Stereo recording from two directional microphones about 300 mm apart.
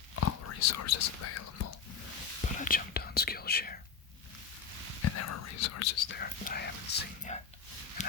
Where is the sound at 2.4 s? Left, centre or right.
Left.